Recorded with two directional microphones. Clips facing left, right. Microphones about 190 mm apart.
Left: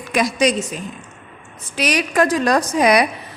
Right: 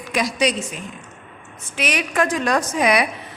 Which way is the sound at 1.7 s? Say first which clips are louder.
Left 4 dB; 35° left (ahead or behind).